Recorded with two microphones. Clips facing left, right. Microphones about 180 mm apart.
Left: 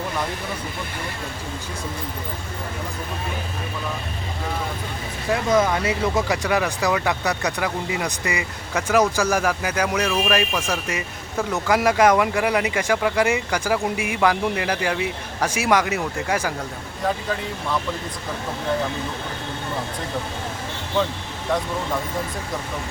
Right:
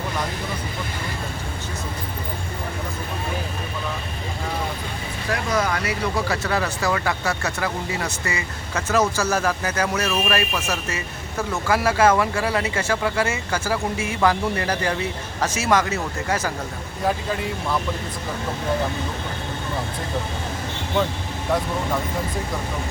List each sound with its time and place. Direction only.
5.3 s speech: 20° left (ahead or behind)